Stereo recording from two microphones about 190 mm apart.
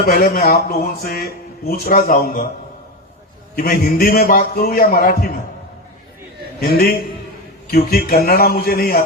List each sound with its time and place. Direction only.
0.1 s speech: 50° left (ahead or behind)
3.5 s speech: 50° left (ahead or behind)
7.7 s speech: 55° left (ahead or behind)